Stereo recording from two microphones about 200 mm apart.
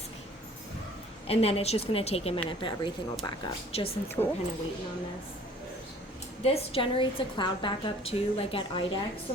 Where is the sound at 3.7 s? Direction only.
30° left (ahead or behind).